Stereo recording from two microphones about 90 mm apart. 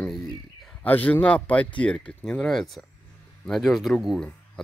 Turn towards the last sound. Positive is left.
turn(degrees=0)  # may be behind; listen again after turning